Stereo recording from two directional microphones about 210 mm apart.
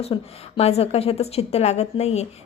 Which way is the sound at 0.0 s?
25° left (ahead or behind).